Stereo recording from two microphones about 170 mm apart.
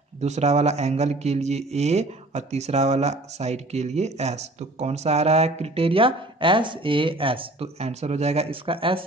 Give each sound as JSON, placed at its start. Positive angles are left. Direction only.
{"t": 0.2, "sound": "speech", "side_deg": -40}